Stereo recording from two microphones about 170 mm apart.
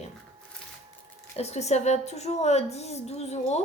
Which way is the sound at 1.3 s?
40° left (ahead or behind).